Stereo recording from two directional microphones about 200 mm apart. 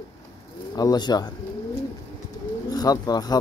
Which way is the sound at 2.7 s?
20° left (ahead or behind).